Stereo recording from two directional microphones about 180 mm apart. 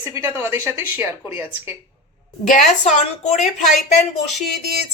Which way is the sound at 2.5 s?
40° left (ahead or behind).